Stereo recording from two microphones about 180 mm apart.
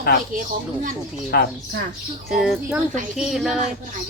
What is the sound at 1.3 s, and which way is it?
Speech, 65° left (ahead or behind).